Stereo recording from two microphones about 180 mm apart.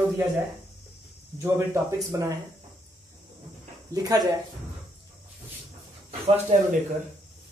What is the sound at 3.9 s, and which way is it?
Speech, 20° right (ahead or behind).